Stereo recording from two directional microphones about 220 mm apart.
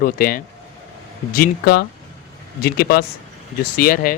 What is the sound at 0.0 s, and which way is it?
Speech, 40° left (ahead or behind).